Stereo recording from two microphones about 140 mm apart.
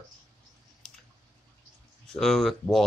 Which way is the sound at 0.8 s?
5° left (ahead or behind).